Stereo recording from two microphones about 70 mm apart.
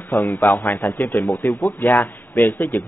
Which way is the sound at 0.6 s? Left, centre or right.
Left.